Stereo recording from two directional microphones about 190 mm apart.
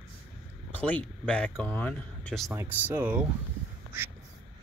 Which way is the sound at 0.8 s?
5° left (ahead or behind).